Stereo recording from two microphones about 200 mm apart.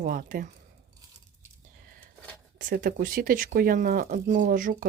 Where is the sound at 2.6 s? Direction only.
45° right (ahead or behind).